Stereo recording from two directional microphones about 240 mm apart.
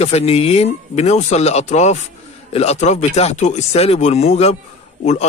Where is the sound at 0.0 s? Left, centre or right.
Left.